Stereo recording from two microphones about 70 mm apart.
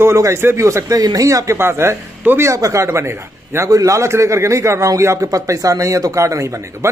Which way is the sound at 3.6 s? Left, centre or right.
Right.